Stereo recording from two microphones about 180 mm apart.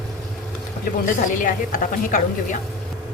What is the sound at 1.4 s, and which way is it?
Speech, 45° left (ahead or behind).